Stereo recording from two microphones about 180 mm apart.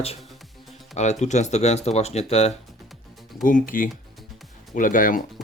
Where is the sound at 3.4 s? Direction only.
50° left (ahead or behind).